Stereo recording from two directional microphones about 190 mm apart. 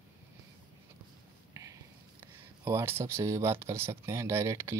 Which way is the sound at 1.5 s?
15° right (ahead or behind).